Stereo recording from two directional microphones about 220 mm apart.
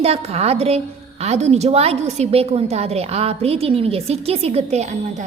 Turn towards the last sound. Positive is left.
turn(degrees=-30)  # may be behind; listen again after turning